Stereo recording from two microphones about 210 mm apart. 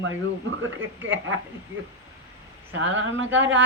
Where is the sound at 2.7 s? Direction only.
65° right (ahead or behind).